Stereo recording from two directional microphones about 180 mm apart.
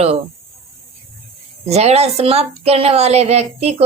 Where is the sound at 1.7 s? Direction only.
35° right (ahead or behind).